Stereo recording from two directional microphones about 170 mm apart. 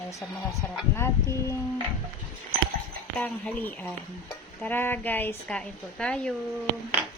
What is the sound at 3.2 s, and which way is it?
A woman's voice, 10° left (ahead or behind).